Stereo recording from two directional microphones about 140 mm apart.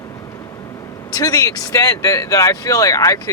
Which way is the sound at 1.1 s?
25° left (ahead or behind).